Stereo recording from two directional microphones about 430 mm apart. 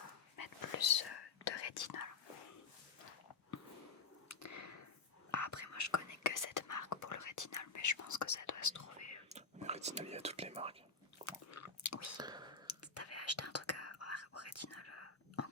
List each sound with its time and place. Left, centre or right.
0.3 s dog: left
1.5 s whispering: left
4.3 s a sound: left
5.3 s whispering: left
9.3 s whispering: centre
11.3 s chewing: left
12.1 s a sound: centre
12.6 s whispering: left